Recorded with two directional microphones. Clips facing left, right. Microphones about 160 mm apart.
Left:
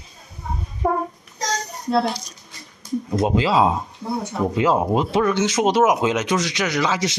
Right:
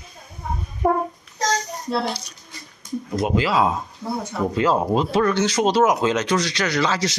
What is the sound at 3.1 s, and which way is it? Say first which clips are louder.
Speech: left 2 dB; 25° left (ahead or behind).